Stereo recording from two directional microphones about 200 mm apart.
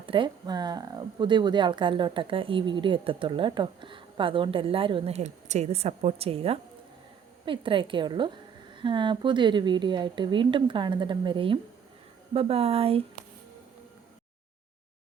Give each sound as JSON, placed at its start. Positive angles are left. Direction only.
{"t": 0.0, "sound": "speech", "side_deg": -25}